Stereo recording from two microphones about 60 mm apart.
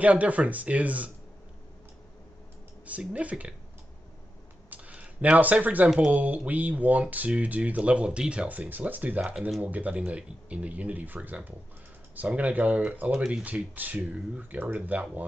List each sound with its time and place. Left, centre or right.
0.0 s speech: right
2.9 s speech: right
4.6 s a sound: right
6.1 s speech: right